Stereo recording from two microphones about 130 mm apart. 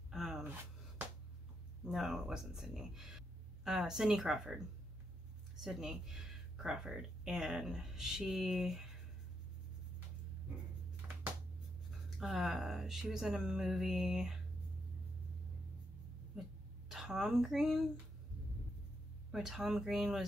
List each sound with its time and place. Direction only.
0.1 s a sound: 5° right (ahead or behind)
1.9 s speech: 5° right (ahead or behind)
5.6 s speech: 5° right (ahead or behind)
11.0 s a sound: 15° right (ahead or behind)
12.2 s speech: centre (ahead or behind)
16.9 s speech: 5° right (ahead or behind)
19.3 s speech: centre (ahead or behind)